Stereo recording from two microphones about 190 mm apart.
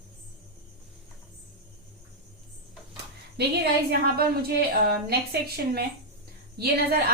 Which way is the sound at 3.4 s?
60° right (ahead or behind).